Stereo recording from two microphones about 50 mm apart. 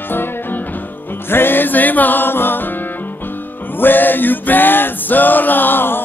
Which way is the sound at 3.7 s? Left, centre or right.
Left.